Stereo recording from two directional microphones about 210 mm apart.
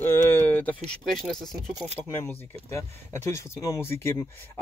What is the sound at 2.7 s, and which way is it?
Speech, 15° left (ahead or behind).